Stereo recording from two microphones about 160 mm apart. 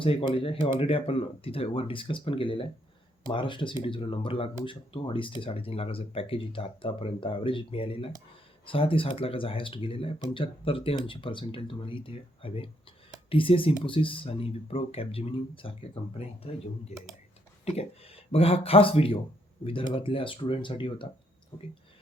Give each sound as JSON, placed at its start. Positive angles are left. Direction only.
{"t": 0.0, "sound": "speech", "side_deg": 35}